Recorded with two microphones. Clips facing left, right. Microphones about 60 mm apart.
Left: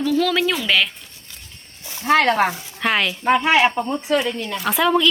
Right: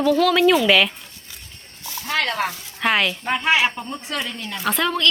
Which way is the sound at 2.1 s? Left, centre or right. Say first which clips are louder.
Left 6 dB; left.